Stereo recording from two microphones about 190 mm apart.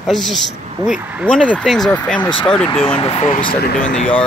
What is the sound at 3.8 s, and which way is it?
Speech, 45° left (ahead or behind).